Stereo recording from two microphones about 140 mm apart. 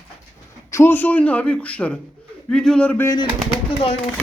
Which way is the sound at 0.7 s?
15° left (ahead or behind).